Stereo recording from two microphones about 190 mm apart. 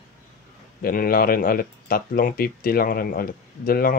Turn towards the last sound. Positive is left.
turn(degrees=50)  # may be behind; listen again after turning